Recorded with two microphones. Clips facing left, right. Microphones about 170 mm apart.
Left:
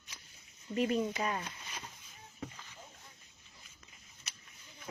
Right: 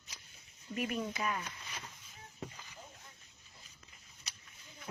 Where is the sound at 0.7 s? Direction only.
25° left (ahead or behind).